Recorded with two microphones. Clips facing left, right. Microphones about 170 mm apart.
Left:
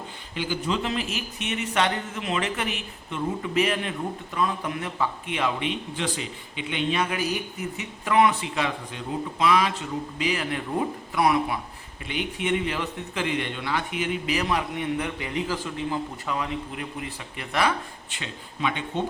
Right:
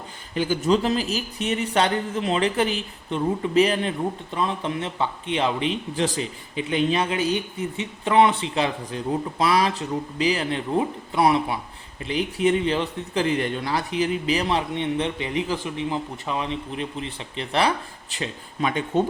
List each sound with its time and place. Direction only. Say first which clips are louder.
0.3 s speech: right 7 dB; 45° right (ahead or behind)